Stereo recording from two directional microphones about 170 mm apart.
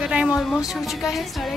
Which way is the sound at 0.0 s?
5° right (ahead or behind).